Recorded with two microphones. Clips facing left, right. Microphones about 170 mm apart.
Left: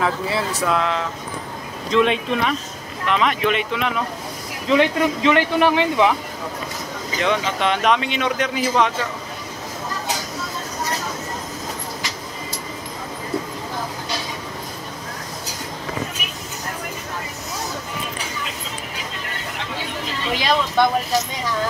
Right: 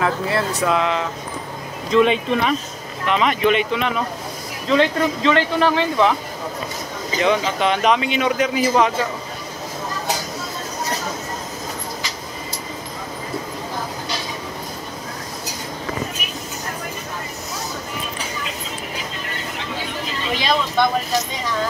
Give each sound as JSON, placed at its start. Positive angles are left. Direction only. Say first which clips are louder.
{"t": 0.0, "sound": "speech", "louder": "right 1 dB", "side_deg": 0}
{"t": 4.6, "sound": "speech", "louder": "even", "side_deg": 15}
{"t": 7.2, "sound": "speech", "louder": "right 3 dB", "side_deg": 0}
{"t": 20.3, "sound": "vehicle", "louder": "left 1 dB", "side_deg": 10}